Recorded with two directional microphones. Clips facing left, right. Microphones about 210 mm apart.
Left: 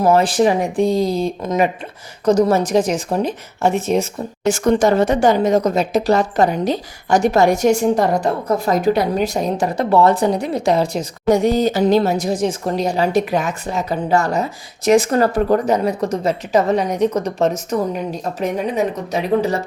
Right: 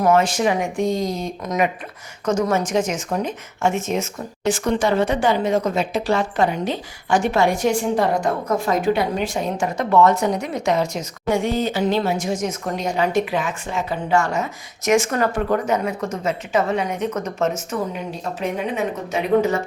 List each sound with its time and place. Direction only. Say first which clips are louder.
0.0 s speech: left 3 dB; 35° left (ahead or behind)